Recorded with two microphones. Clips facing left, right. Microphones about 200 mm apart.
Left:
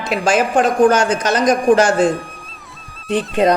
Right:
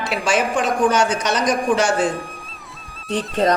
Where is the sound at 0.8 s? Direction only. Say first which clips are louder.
Left 4 dB; 55° left (ahead or behind).